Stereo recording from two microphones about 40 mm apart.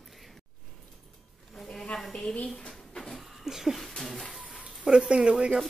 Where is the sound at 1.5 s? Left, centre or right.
Centre.